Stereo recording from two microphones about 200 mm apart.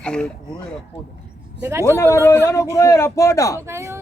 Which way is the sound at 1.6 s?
10° right (ahead or behind).